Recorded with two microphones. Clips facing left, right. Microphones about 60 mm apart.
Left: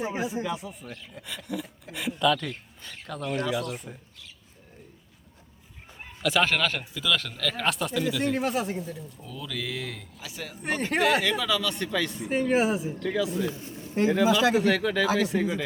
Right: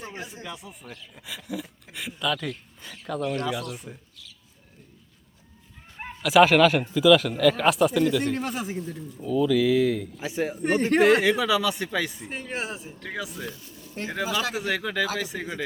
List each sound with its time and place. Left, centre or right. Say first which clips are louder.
0.0 s speech: left 8 dB; centre
6.2 s speech: right 8 dB; centre
10.2 s speech: right 11 dB; right
10.7 s speech: right 5 dB; centre
12.2 s speech: left 9 dB; centre
13.0 s speech: left 7 dB; centre
13.6 s a sound: left 8 dB; left
14.5 s speech: left 4 dB; centre